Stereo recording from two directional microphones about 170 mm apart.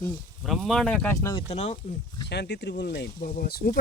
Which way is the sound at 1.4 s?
40° left (ahead or behind).